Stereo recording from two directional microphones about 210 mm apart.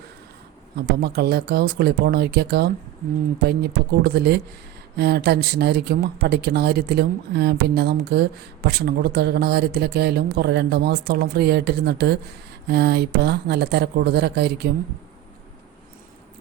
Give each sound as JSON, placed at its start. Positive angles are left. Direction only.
{"t": 0.8, "sound": "speech", "side_deg": -50}